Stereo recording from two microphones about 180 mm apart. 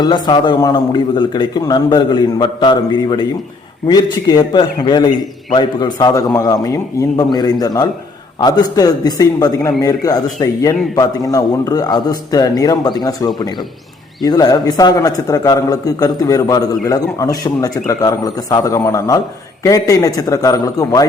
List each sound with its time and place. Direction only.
0.0 s a man's voice: 25° left (ahead or behind)